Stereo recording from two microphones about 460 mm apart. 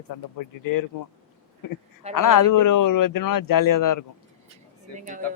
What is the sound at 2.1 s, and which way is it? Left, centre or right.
A man's voice, left.